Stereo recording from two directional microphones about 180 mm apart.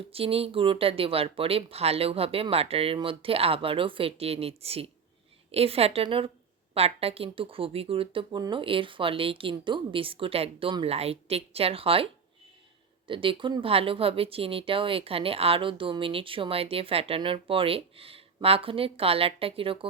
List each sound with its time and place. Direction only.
0.1 s speech: 30° right (ahead or behind)
13.1 s speech: 30° right (ahead or behind)